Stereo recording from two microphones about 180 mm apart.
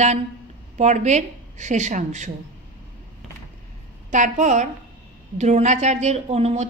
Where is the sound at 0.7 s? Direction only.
40° right (ahead or behind).